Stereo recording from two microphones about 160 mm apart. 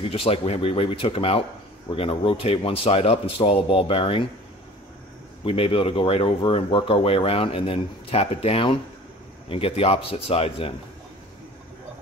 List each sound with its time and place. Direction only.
0.1 s speech: 35° left (ahead or behind)
5.4 s speech: 35° left (ahead or behind)